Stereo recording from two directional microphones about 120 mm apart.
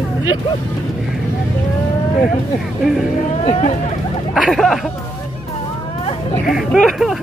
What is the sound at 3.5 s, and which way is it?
Speech, 55° left (ahead or behind).